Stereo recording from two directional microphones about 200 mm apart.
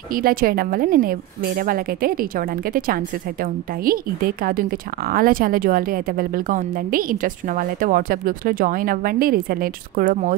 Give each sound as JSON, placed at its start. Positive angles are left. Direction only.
{"t": 0.1, "sound": "speech", "side_deg": -45}